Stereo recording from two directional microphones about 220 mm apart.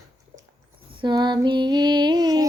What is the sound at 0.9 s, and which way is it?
Female singing, 20° right (ahead or behind).